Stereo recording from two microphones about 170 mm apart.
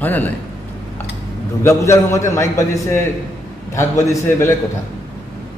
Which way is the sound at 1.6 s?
15° left (ahead or behind).